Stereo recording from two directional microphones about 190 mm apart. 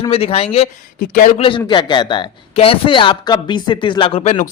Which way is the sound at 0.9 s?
45° left (ahead or behind).